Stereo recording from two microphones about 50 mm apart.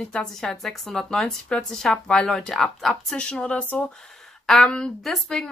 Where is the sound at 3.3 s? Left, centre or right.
Left.